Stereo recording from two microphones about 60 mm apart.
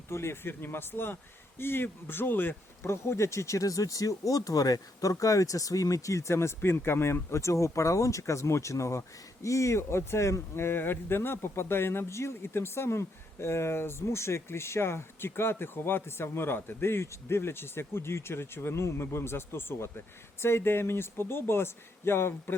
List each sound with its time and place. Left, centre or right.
0.1 s speech: left
2.8 s speech: left
6.3 s speech: left